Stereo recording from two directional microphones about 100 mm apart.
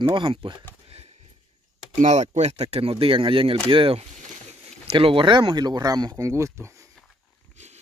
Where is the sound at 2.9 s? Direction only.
60° right (ahead or behind); by 6.7 s 30° right (ahead or behind).